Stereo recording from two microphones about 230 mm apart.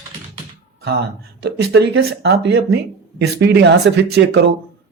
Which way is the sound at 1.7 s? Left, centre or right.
Right.